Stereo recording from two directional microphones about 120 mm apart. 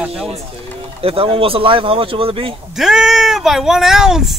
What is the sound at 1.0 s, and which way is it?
Speech, 50° right (ahead or behind).